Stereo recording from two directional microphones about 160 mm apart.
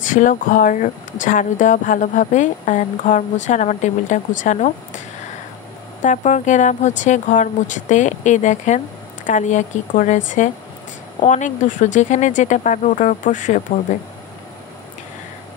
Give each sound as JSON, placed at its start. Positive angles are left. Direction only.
{"t": 0.0, "sound": "speech", "side_deg": 55}
{"t": 6.0, "sound": "speech", "side_deg": 50}